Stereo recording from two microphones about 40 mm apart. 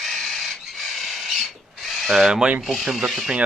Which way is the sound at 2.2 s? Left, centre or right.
Right.